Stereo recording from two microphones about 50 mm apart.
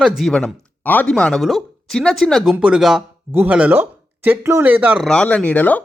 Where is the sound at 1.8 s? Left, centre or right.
Centre.